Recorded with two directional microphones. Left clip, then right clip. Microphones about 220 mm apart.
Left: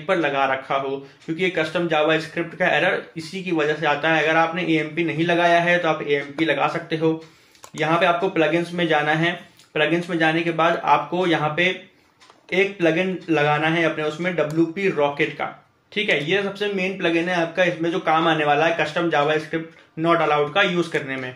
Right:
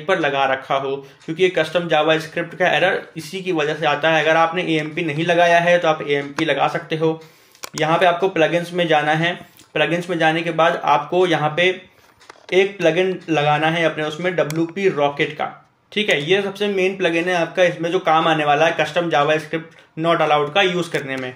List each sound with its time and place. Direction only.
0.0 s speech: 40° right (ahead or behind)